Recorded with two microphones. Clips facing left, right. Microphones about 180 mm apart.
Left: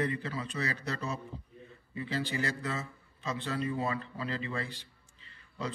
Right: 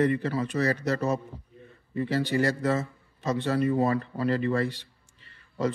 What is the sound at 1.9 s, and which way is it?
Speech, 50° right (ahead or behind).